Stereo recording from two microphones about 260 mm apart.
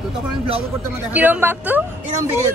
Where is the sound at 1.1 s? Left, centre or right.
Centre.